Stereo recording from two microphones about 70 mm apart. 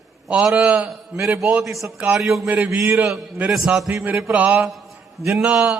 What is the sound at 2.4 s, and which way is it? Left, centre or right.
Mantra, right.